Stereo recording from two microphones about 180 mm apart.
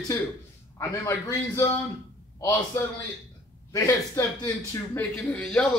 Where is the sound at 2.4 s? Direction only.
15° left (ahead or behind).